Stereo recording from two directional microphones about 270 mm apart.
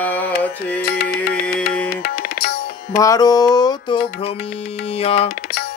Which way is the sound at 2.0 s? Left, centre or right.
Left.